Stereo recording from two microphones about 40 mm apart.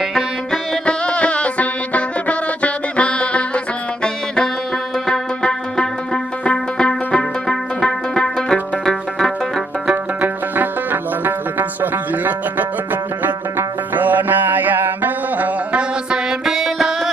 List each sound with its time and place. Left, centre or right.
0.8 s music: left
7.4 s music: centre
10.2 s music: right
15.7 s music: right
16.4 s music: centre